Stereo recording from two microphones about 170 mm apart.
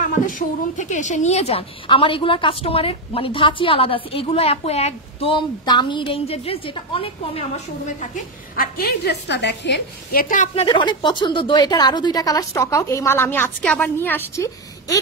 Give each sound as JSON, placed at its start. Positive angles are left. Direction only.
{"t": 0.0, "sound": "a woman's voice", "side_deg": 50}
{"t": 8.5, "sound": "a woman's voice", "side_deg": 65}
{"t": 10.2, "sound": "a woman's voice", "side_deg": 45}